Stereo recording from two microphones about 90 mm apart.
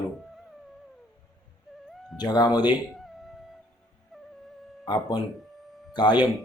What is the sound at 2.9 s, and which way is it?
Music, centre (ahead or behind).